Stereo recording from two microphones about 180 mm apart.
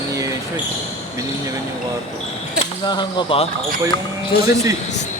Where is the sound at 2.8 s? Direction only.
25° left (ahead or behind).